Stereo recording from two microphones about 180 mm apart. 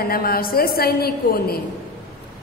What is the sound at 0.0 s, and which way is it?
A woman's voice, 55° left (ahead or behind).